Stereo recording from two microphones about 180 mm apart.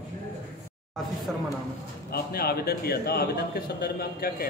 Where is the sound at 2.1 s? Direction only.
60° left (ahead or behind).